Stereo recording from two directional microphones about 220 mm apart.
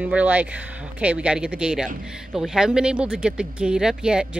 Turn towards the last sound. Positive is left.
turn(degrees=-5)  # may be behind; listen again after turning